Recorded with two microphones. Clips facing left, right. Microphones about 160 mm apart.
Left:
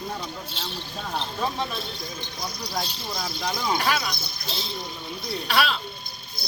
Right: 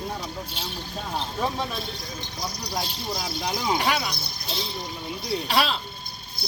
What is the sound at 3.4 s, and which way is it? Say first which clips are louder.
Speech: even; 15° right (ahead or behind).